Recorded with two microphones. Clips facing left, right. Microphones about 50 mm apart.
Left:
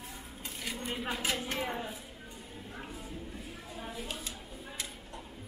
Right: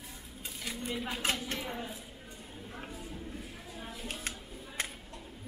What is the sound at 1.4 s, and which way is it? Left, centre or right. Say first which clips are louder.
Speech: left 3 dB; left.